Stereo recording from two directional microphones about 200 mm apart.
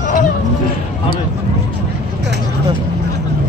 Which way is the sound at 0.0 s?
40° left (ahead or behind).